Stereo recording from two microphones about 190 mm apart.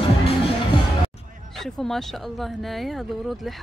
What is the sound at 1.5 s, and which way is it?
Speech, centre (ahead or behind).